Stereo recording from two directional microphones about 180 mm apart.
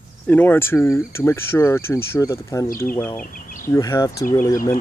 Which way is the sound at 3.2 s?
50° left (ahead or behind).